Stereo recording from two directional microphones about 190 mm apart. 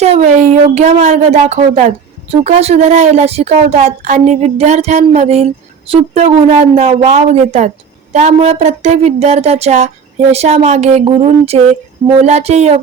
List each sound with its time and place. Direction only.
0.0 s speech: 35° right (ahead or behind)